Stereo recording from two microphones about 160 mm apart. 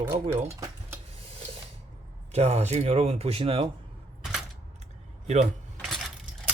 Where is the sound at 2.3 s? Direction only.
40° right (ahead or behind).